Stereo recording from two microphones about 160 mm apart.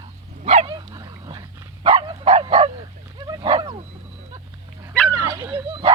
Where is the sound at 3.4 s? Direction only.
35° right (ahead or behind).